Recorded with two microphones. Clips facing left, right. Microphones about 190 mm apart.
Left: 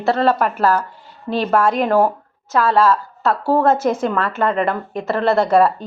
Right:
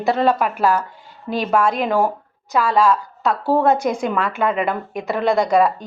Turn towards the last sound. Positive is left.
turn(degrees=-10)  # may be behind; listen again after turning